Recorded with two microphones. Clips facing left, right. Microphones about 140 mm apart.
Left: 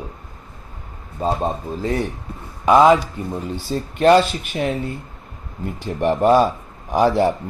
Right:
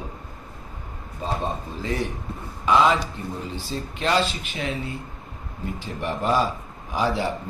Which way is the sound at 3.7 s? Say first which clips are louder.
Left 12 dB; 50° left (ahead or behind).